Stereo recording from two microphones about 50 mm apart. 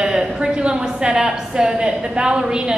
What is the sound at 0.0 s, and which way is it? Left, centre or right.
A woman's voice, centre.